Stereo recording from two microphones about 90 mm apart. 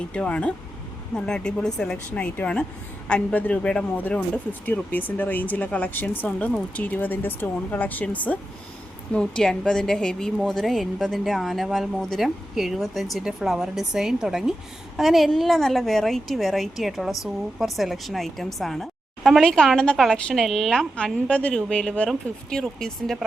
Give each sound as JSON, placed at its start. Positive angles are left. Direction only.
{"t": 0.1, "sound": "speech", "side_deg": 10}
{"t": 9.1, "sound": "a woman's voice", "side_deg": 5}